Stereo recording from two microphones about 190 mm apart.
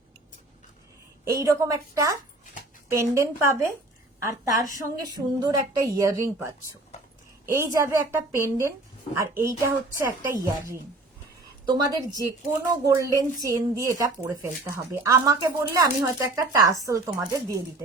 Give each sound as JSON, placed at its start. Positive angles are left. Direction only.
{"t": 1.2, "sound": "a woman's voice", "side_deg": -15}